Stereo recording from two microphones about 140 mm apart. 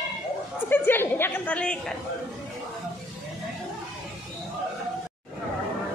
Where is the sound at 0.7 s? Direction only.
15° left (ahead or behind).